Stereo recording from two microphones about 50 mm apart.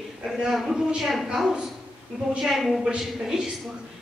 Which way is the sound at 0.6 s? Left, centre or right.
Centre.